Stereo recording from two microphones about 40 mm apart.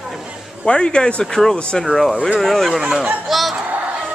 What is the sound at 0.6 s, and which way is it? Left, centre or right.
Speech, left.